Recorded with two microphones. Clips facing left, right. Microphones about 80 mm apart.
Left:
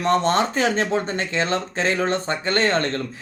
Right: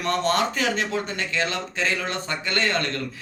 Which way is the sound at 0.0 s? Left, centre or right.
Left.